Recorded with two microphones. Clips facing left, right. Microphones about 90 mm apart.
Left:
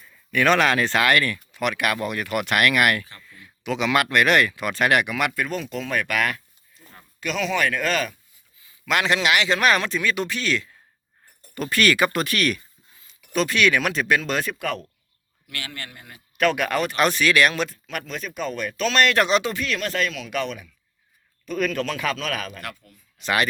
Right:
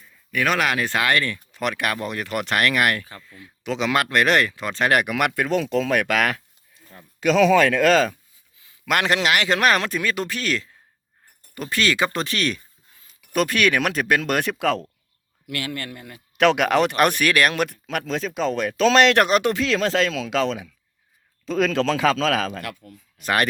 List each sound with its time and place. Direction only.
0.3 s speech: 5° right (ahead or behind); by 1.4 s 25° right (ahead or behind)
1.5 s speech: 35° right (ahead or behind)
3.6 s speech: 35° right (ahead or behind)
4.9 s speech: 45° right (ahead or behind)
5.1 s speech: 65° right (ahead or behind); by 8.1 s 90° right
8.9 s speech: 50° right (ahead or behind)
11.5 s speech: 20° right (ahead or behind)
13.1 s speech: 50° right (ahead or behind); by 14.8 s 80° right
16.4 s speech: 85° right
17.0 s speech: 55° right (ahead or behind); by 19.2 s 75° right (ahead or behind)
19.2 s speech: 55° right (ahead or behind); by 22.6 s 90° right
22.8 s speech: 45° right (ahead or behind)